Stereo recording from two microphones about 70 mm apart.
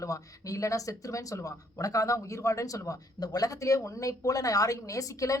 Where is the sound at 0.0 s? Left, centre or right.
Left.